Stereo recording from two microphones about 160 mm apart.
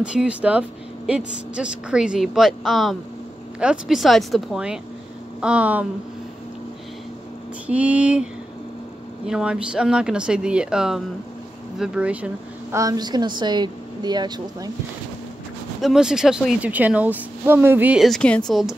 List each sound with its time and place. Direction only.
0.0 s a woman's voice: 5° right (ahead or behind)
7.6 s a woman's voice: 10° right (ahead or behind)
12.7 s a woman's voice: 25° right (ahead or behind)
15.8 s a woman's voice: 5° right (ahead or behind)
18.0 s speech: 5° left (ahead or behind)